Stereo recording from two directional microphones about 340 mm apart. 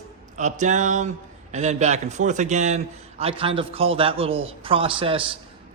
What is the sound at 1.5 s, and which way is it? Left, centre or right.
A man's voice, centre.